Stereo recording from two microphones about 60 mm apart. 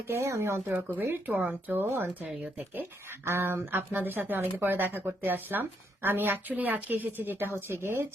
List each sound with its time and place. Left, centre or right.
0.1 s speech: right
0.6 s speech: right
3.2 s speech: right